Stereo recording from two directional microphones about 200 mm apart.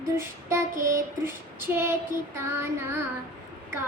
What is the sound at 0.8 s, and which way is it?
Child singing, 10° right (ahead or behind).